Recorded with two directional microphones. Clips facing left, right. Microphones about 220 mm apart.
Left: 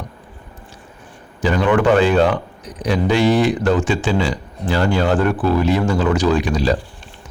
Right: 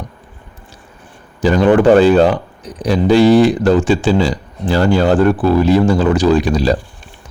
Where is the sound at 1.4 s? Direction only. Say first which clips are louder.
Right 5 dB; 35° right (ahead or behind).